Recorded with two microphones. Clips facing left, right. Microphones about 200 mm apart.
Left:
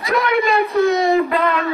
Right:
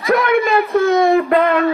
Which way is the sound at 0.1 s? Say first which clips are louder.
Right 3 dB; 50° right (ahead or behind).